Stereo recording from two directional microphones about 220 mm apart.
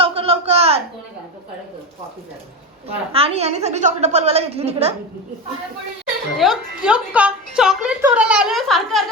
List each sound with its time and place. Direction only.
0.0 s a sound: 25° right (ahead or behind)
2.9 s a woman's voice: 25° right (ahead or behind)
6.3 s a woman's voice: centre (ahead or behind)